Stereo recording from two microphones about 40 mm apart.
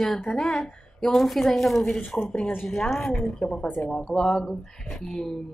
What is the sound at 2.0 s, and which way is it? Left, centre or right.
Speech, left.